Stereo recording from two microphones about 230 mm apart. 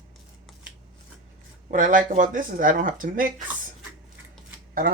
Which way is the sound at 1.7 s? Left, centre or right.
Right.